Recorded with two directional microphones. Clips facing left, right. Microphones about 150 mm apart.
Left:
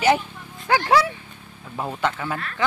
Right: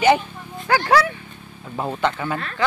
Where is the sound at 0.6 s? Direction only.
20° left (ahead or behind).